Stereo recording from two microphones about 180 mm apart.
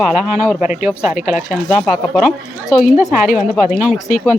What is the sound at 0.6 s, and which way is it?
Speech, 45° left (ahead or behind).